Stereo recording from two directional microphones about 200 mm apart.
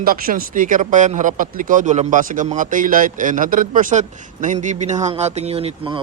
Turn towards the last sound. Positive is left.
turn(degrees=-25)  # may be behind; listen again after turning